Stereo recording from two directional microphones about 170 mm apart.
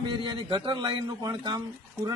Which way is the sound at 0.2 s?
30° right (ahead or behind).